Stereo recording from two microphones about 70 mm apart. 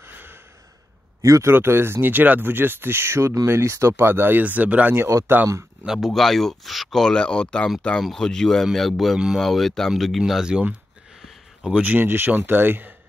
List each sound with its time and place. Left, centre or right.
0.0 s gasp: right
1.2 s speech: right
1.5 s speech: right
5.3 s speech: right
5.9 s speech: centre
11.2 s a sound: centre
11.8 s speech: right